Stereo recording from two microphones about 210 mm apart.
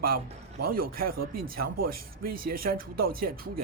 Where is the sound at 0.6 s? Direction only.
45° right (ahead or behind).